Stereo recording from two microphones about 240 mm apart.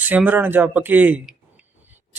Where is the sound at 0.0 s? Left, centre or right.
Centre.